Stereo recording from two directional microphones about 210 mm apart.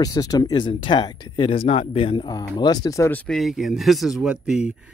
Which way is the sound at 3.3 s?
Centre (ahead or behind).